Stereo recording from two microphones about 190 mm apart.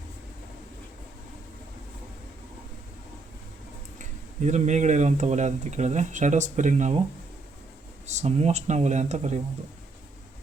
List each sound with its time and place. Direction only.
3.9 s speech: 40° right (ahead or behind)
8.0 s speech: 35° right (ahead or behind)